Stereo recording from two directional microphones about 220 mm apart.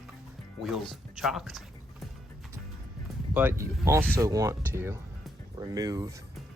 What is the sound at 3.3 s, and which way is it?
Speech, 10° right (ahead or behind).